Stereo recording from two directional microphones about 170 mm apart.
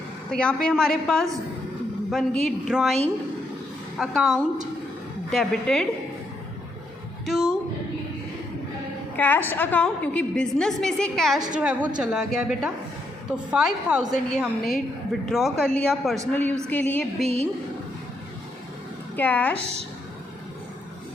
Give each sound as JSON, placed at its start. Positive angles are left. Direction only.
{"t": 0.3, "sound": "a woman's voice", "side_deg": 5}
{"t": 9.1, "sound": "a woman's voice", "side_deg": 10}
{"t": 17.2, "sound": "a woman's voice", "side_deg": -40}
{"t": 19.1, "sound": "a woman's voice", "side_deg": 10}